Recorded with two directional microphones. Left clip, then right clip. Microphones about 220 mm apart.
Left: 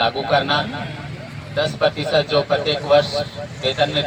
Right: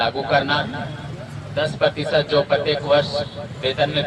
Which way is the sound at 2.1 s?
15° left (ahead or behind).